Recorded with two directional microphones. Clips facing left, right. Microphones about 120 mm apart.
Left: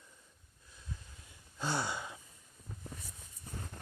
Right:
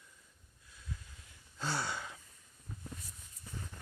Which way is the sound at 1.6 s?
15° left (ahead or behind).